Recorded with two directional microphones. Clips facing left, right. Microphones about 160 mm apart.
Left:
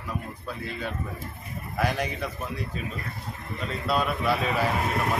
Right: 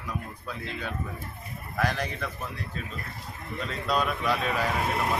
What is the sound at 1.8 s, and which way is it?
Speech, 10° left (ahead or behind).